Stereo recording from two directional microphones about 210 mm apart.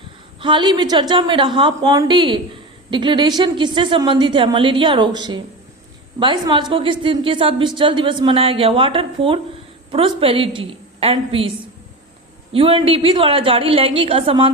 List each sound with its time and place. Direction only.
0.3 s a woman's voice: 25° right (ahead or behind)
12.5 s a woman's voice: 25° right (ahead or behind)